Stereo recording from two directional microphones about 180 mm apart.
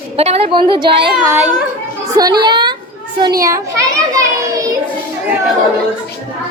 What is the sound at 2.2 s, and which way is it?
Speech, 20° right (ahead or behind).